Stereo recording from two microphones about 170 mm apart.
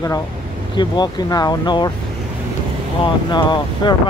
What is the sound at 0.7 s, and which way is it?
Speech, 25° left (ahead or behind).